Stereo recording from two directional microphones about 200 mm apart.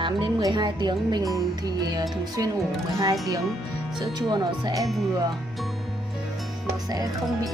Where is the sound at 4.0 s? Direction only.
20° right (ahead or behind).